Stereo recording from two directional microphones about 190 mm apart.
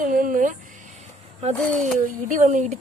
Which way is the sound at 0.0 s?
45° right (ahead or behind).